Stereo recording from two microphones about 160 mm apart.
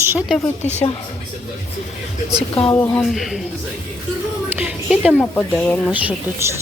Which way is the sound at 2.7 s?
15° left (ahead or behind).